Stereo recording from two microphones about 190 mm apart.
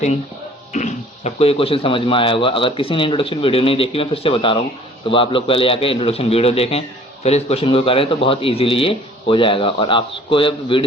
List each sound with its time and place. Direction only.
0.7 s a man's voice: 40° left (ahead or behind)